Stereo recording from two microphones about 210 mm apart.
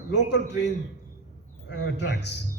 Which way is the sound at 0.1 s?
55° left (ahead or behind).